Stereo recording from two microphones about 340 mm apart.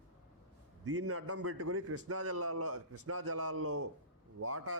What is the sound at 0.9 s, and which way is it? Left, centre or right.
A man's voice, right.